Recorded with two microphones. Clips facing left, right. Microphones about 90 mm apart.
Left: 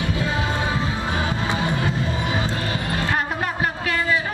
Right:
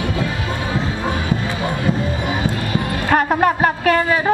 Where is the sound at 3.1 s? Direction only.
55° right (ahead or behind).